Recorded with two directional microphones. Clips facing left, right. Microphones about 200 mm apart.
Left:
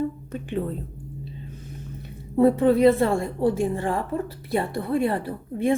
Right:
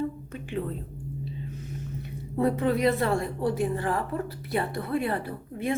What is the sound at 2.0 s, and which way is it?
A woman's voice, 30° left (ahead or behind).